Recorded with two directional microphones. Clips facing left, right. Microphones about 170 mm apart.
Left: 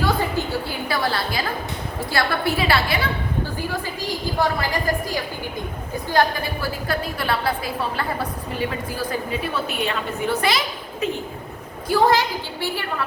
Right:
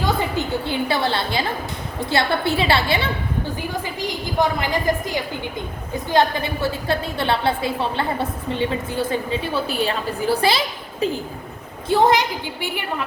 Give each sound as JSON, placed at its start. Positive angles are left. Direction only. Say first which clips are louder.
{"t": 0.0, "sound": "a woman's voice", "louder": "even", "side_deg": -20}
{"t": 4.4, "sound": "a woman's voice", "louder": "right 3 dB", "side_deg": -20}
{"t": 11.9, "sound": "a woman's voice", "louder": "right 1 dB", "side_deg": -20}